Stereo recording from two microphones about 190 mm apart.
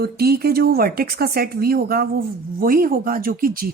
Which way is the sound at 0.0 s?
55° right (ahead or behind).